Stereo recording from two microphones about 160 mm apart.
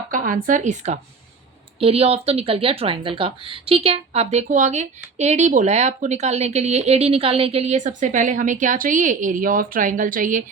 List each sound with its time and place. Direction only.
0.1 s speech: 55° right (ahead or behind)